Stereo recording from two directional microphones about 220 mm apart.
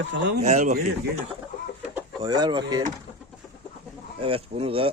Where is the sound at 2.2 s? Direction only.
20° right (ahead or behind).